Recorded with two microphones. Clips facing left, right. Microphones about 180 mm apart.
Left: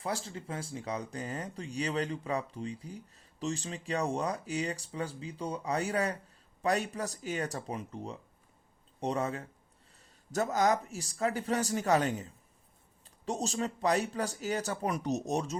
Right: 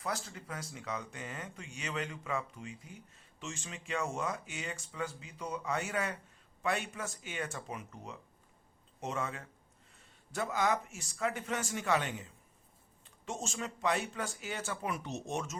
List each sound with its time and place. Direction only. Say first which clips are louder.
0.0 s speech: left 3 dB; 30° left (ahead or behind)